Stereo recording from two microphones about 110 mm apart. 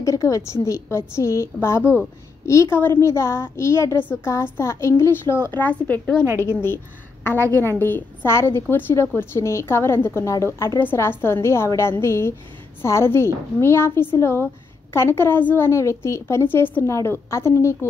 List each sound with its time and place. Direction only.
0.0 s speech: 30° left (ahead or behind)